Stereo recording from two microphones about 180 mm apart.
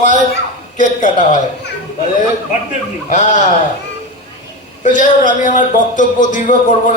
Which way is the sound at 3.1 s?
40° left (ahead or behind).